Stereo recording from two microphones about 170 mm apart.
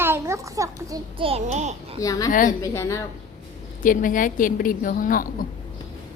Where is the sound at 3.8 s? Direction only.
50° left (ahead or behind).